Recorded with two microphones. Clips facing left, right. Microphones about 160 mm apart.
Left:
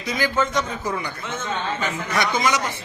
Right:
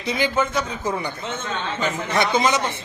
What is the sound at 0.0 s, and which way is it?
A man's voice, 30° right (ahead or behind).